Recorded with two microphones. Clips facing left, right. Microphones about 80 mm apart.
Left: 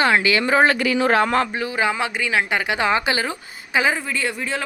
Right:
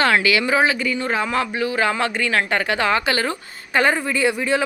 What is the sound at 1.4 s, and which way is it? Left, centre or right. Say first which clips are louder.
Speech: right 1 dB; left.